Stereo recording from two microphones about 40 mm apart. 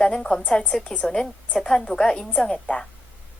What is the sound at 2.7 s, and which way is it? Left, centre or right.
Speech, left.